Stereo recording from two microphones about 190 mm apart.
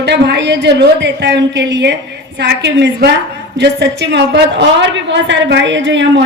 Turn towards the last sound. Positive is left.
turn(degrees=-70)  # may be behind; listen again after turning